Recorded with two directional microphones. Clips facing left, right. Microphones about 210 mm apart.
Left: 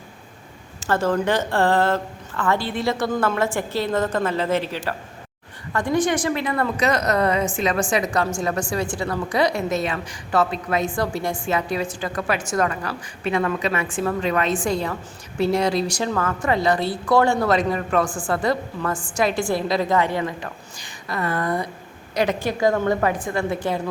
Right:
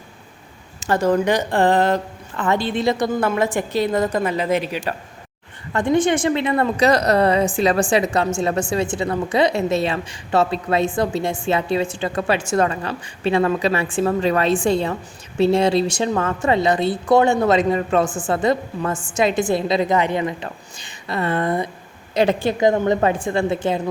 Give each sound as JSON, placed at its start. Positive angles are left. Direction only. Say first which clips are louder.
{"t": 0.8, "sound": "a woman's voice", "louder": "right 3 dB", "side_deg": -15}